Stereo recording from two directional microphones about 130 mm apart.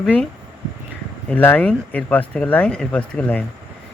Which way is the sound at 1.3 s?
10° left (ahead or behind).